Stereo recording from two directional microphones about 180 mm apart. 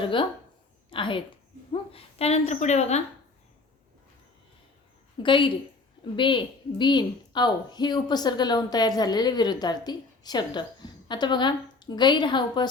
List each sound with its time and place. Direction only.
0.0 s a woman's voice: 30° left (ahead or behind)
5.2 s a woman's voice: 25° left (ahead or behind)